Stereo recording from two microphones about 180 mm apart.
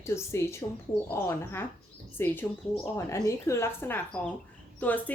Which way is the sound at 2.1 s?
10° left (ahead or behind).